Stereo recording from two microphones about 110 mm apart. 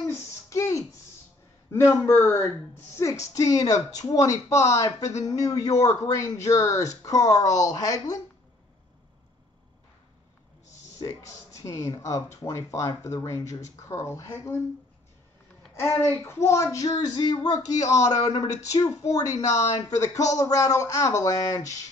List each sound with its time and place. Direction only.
0.0 s a sound: 25° left (ahead or behind)
1.7 s a man's voice: 25° left (ahead or behind)
11.0 s speech: 30° left (ahead or behind)
15.7 s a man's voice: 20° left (ahead or behind)